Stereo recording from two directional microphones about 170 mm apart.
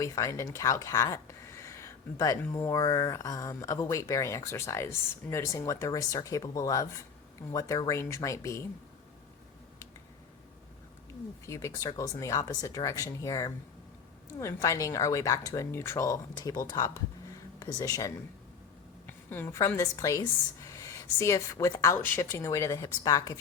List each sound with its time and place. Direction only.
0.0 s speech: 20° left (ahead or behind)
11.4 s speech: 20° left (ahead or behind)